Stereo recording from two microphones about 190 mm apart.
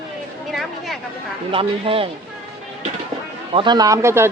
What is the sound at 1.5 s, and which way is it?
Speech, 30° right (ahead or behind).